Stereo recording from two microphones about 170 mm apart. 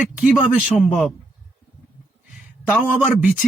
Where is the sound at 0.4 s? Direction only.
Centre (ahead or behind).